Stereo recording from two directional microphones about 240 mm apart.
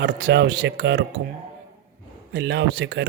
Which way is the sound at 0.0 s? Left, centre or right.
Right.